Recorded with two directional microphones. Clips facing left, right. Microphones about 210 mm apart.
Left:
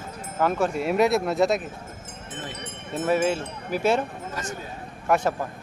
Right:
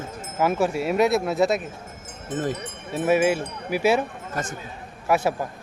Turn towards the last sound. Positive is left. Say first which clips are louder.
# right 1 dB
turn(degrees=-5)  # may be behind; listen again after turning